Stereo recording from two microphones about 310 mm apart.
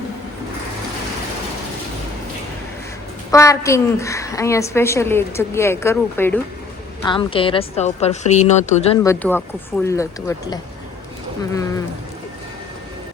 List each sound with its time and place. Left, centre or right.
3.3 s a woman's voice: centre
9.0 s a woman's voice: centre